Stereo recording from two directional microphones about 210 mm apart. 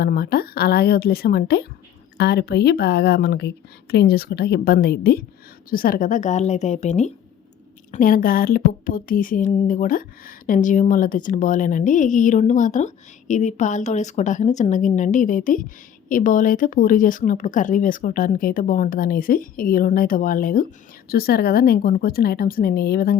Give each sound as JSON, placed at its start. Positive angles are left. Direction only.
{"t": 0.0, "sound": "a woman's voice", "side_deg": 50}